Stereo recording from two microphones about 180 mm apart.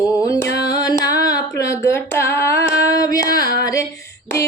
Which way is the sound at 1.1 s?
20° left (ahead or behind).